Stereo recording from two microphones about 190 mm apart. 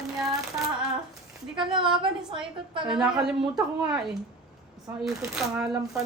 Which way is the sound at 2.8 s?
5° right (ahead or behind).